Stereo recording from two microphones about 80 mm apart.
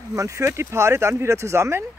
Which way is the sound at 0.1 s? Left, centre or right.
Right.